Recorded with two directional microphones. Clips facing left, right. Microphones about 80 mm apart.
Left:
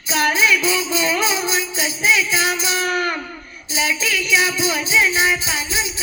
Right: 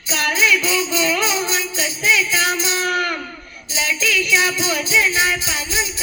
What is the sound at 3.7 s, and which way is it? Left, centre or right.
Music, left.